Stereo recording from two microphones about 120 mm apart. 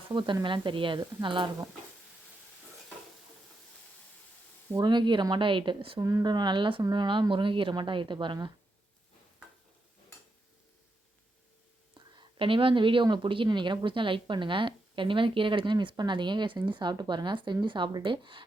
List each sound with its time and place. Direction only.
0.1 s a woman's voice: 40° right (ahead or behind)
4.8 s speech: 40° right (ahead or behind)
6.0 s speech: 30° right (ahead or behind)
11.9 s a woman's voice: 45° right (ahead or behind)